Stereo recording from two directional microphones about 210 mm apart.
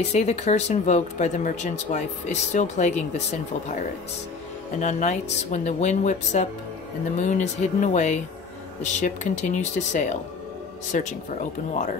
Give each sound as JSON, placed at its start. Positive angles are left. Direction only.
{"t": 0.1, "sound": "speech", "side_deg": 30}
{"t": 4.7, "sound": "speech", "side_deg": 35}